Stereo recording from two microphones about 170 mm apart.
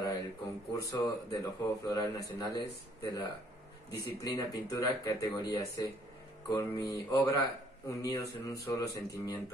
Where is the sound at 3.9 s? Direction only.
20° left (ahead or behind).